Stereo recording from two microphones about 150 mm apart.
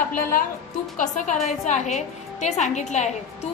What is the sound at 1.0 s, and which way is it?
A woman's voice, 55° left (ahead or behind).